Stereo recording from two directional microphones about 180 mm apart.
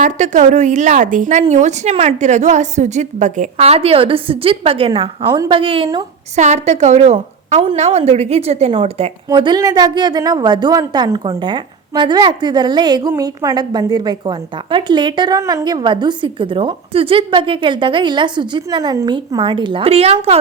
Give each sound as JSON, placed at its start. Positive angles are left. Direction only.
{"t": 0.0, "sound": "a woman's voice", "side_deg": -40}
{"t": 6.3, "sound": "a woman's voice", "side_deg": -40}